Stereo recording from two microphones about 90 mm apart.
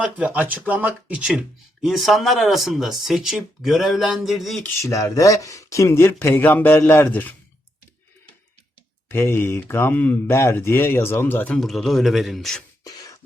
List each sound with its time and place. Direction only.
0.0 s speech: 15° right (ahead or behind); by 4.6 s centre (ahead or behind)
4.8 s speech: 35° left (ahead or behind); by 7.3 s 20° left (ahead or behind)
9.0 s speech: 25° left (ahead or behind)
11.5 s speech: 5° left (ahead or behind)
12.8 s beatboxing: 40° left (ahead or behind)